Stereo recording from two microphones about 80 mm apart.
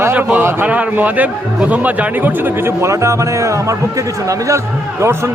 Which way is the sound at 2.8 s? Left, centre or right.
Right.